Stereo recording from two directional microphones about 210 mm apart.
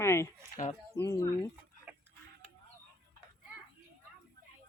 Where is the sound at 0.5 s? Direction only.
35° left (ahead or behind).